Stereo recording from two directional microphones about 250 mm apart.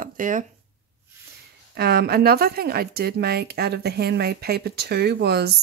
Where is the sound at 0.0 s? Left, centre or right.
Right.